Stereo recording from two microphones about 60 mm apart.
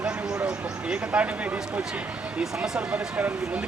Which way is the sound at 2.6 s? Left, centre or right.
Right.